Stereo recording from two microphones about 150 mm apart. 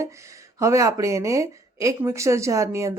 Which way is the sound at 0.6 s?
20° right (ahead or behind).